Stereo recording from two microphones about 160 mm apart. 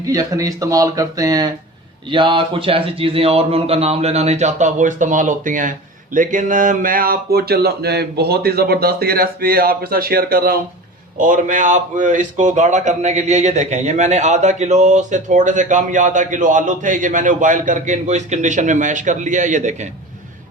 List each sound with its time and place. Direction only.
0.0 s a man's voice: 20° right (ahead or behind); by 10.6 s 65° right (ahead or behind)
11.2 s speech: 55° right (ahead or behind)